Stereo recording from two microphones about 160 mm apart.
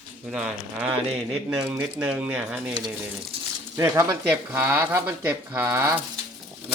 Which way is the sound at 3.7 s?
20° right (ahead or behind).